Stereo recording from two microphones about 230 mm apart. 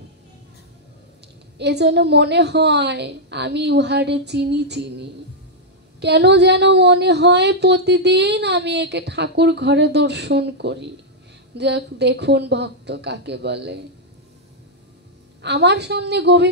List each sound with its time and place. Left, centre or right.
1.6 s a woman's voice: right
15.4 s a woman's voice: right